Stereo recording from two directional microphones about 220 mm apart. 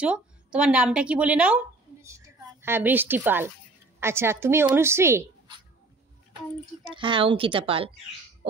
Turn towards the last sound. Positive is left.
turn(degrees=-25)  # may be behind; listen again after turning